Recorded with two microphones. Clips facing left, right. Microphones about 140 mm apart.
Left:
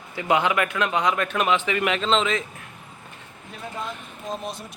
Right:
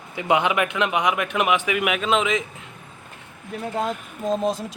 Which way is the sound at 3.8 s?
90° right.